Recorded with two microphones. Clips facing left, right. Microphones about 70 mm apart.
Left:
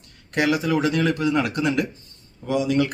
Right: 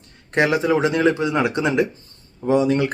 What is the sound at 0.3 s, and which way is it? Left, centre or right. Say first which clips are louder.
Speech: right 3 dB; right.